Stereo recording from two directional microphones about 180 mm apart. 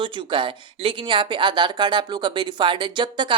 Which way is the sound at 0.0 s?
30° right (ahead or behind).